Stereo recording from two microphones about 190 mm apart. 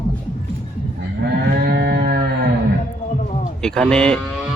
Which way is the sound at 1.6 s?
55° right (ahead or behind).